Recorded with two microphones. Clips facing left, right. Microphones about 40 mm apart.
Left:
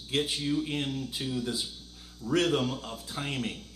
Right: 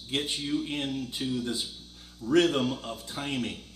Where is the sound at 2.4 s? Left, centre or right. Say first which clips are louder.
Right 2 dB; centre.